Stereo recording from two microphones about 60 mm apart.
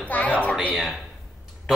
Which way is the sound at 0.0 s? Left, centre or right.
Left.